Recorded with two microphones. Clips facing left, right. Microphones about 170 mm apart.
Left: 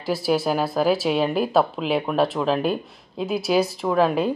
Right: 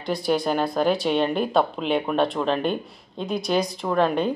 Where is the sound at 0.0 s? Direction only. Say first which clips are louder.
Left 1 dB; 5° left (ahead or behind).